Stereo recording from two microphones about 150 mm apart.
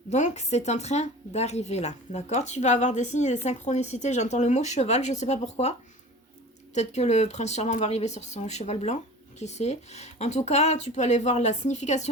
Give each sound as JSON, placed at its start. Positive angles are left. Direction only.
{"t": 0.1, "sound": "speech", "side_deg": 50}
{"t": 6.7, "sound": "speech", "side_deg": 50}